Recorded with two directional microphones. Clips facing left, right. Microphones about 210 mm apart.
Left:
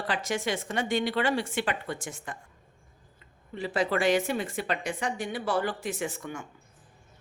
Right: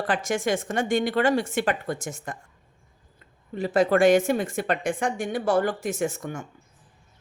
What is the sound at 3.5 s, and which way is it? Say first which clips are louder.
Speech: right 7 dB; 45° right (ahead or behind).